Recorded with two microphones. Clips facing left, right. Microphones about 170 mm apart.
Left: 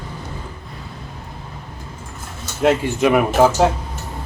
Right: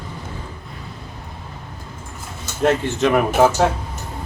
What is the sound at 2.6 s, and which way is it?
Speech, 10° left (ahead or behind).